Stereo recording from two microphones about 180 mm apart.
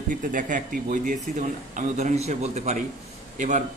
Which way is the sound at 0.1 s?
50° right (ahead or behind).